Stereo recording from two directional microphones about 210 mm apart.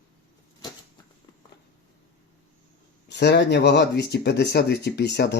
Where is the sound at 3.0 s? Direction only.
55° left (ahead or behind).